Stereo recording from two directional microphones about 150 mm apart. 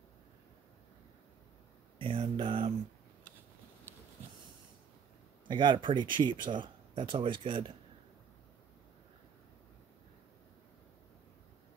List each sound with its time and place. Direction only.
2.0 s speech: 35° right (ahead or behind)
3.9 s a sound: 15° right (ahead or behind)
5.5 s speech: 30° right (ahead or behind)